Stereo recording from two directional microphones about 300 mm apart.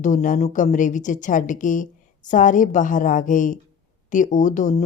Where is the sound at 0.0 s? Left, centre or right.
Left.